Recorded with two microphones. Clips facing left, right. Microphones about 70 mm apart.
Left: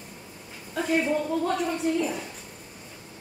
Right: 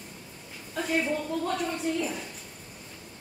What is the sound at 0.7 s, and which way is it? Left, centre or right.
A woman's voice, centre.